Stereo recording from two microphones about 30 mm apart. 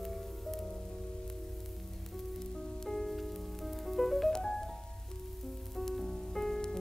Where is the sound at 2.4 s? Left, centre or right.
Centre.